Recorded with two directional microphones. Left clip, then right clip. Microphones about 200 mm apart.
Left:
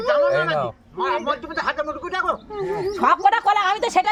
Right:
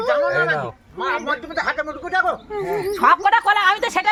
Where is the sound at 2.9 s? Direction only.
50° left (ahead or behind).